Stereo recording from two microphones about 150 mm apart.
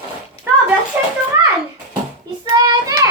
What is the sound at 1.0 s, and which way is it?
Speech, 10° right (ahead or behind).